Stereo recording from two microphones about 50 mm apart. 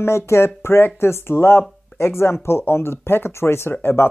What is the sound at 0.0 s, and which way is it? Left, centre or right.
Speech, left.